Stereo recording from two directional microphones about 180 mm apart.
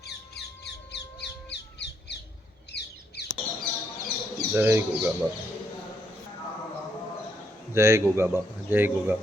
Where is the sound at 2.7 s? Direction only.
65° left (ahead or behind).